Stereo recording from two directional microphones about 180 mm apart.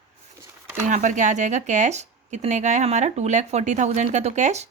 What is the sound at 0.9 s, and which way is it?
Speech, 45° right (ahead or behind).